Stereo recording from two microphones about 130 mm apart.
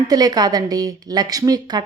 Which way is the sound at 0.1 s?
30° right (ahead or behind).